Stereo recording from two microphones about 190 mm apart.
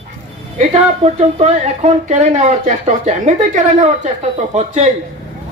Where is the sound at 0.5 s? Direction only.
40° right (ahead or behind).